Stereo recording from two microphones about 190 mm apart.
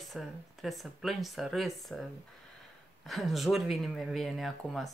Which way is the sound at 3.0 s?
Centre (ahead or behind).